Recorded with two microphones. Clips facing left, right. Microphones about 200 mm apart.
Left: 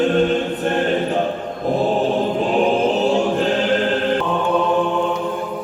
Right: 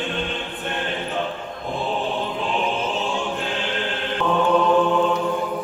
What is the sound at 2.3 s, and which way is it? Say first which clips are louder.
Choir: left 8 dB; 45° left (ahead or behind).